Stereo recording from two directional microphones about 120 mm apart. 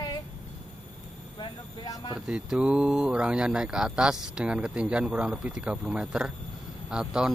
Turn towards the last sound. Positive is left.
turn(degrees=-5)  # may be behind; listen again after turning